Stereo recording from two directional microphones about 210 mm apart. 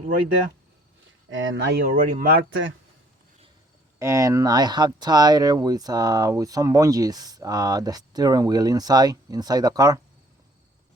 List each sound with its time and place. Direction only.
1.3 s speech: 65° right (ahead or behind)
1.8 s speech: 40° right (ahead or behind)
2.5 s speech: 65° right (ahead or behind)
3.9 s speech: 15° right (ahead or behind)